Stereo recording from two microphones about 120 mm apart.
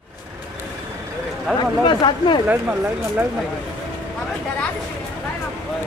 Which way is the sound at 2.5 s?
15° right (ahead or behind).